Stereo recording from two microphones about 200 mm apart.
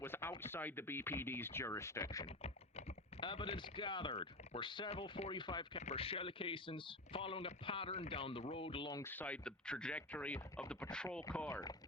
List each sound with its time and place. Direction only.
0.0 s speech: 10° left (ahead or behind)
2.2 s speech: 30° left (ahead or behind); by 11.6 s 10° left (ahead or behind)